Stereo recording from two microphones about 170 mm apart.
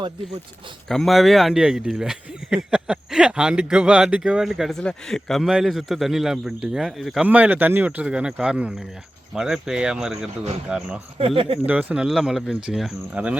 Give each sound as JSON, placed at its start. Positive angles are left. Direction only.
{"t": 0.9, "sound": "speech", "side_deg": 0}
{"t": 11.3, "sound": "speech", "side_deg": -35}
{"t": 11.6, "sound": "speech", "side_deg": -10}